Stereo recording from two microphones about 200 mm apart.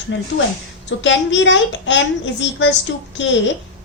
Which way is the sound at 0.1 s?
70° left (ahead or behind).